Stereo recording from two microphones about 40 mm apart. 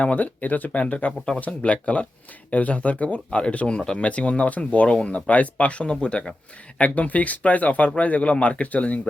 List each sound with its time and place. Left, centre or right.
0.0 s speech: left